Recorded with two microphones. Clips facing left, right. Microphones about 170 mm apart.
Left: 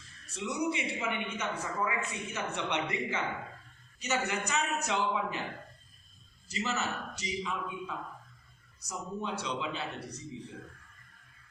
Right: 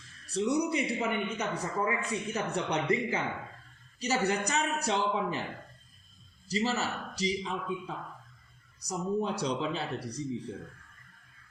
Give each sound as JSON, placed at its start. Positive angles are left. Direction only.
{"t": 0.3, "sound": "a man's voice", "side_deg": -35}
{"t": 6.5, "sound": "a man's voice", "side_deg": -35}